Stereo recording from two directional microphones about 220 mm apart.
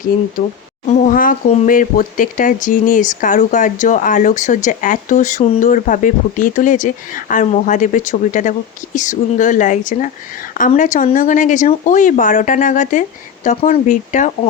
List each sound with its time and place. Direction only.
0.9 s speech: 35° left (ahead or behind)